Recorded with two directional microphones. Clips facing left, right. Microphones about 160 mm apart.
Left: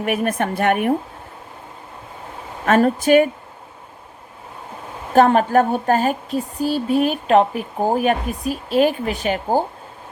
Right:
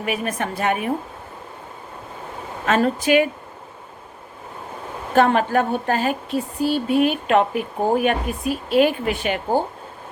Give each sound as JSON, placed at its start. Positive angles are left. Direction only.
{"t": 0.0, "sound": "a woman's voice", "side_deg": 55}
{"t": 2.6, "sound": "speech", "side_deg": 50}
{"t": 5.1, "sound": "speech", "side_deg": 40}